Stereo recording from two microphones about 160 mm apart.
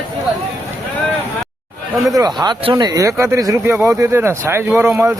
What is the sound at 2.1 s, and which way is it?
Speech, 25° right (ahead or behind).